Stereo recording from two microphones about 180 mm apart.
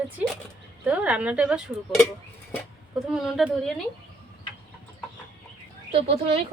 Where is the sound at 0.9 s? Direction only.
5° right (ahead or behind).